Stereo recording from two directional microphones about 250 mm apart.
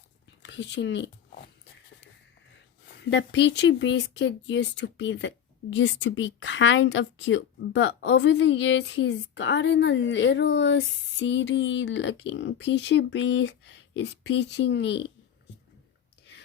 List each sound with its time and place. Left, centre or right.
0.4 s speech: left
2.9 s speech: left